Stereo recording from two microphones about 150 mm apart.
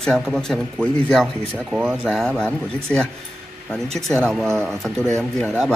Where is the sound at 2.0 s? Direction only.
5° left (ahead or behind).